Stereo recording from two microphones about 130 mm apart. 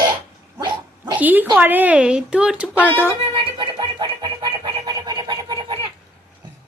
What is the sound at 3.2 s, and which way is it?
Music, 40° right (ahead or behind).